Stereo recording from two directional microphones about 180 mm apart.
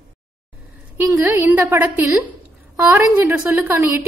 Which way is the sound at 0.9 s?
15° right (ahead or behind).